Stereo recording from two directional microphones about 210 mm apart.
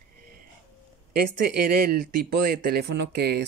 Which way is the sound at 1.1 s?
45° right (ahead or behind).